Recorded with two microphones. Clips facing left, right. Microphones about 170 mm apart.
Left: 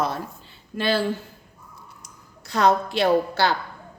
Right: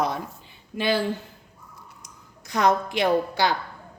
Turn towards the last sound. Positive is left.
turn(degrees=-15)  # may be behind; listen again after turning